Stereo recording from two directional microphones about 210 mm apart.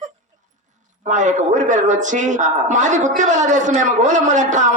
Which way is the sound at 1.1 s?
35° right (ahead or behind).